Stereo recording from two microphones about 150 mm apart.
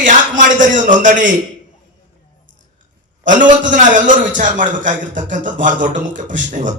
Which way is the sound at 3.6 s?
60° right (ahead or behind).